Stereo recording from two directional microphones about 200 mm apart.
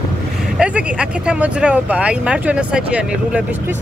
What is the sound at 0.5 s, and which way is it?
Speech, 5° right (ahead or behind).